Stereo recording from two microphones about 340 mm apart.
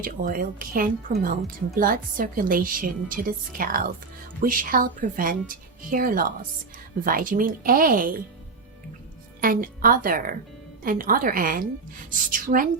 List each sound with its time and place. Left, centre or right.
0.0 s a woman's voice: right
9.4 s a woman's voice: right